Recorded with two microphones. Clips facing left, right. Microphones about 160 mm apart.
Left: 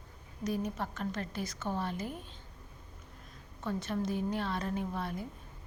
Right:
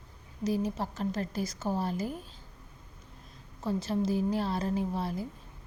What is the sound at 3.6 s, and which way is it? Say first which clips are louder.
A woman's voice: right 4 dB; 30° right (ahead or behind).